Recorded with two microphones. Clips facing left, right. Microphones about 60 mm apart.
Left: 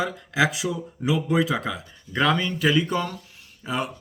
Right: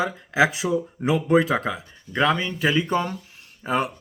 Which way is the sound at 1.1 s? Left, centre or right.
Right.